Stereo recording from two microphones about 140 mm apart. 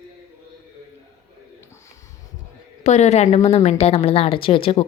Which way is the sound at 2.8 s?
50° left (ahead or behind).